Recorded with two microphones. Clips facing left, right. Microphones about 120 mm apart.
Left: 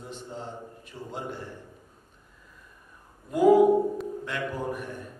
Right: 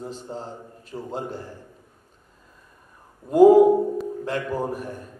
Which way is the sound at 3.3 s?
35° right (ahead or behind).